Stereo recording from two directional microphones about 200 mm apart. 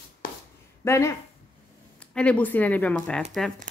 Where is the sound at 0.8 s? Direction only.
15° left (ahead or behind).